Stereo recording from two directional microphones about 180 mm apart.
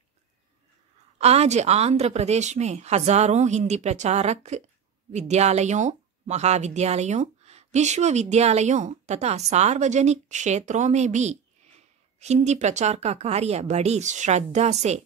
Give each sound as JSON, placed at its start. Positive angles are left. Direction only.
{"t": 1.1, "sound": "speech", "side_deg": -35}